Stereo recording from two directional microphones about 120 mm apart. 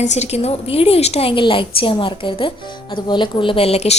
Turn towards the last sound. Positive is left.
turn(degrees=60)  # may be behind; listen again after turning